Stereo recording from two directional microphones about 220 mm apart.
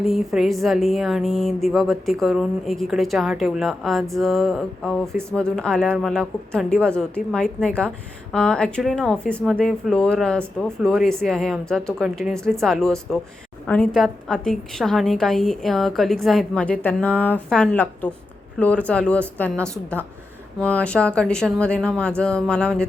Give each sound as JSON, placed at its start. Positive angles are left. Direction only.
{"t": 0.0, "sound": "a woman's voice", "side_deg": 0}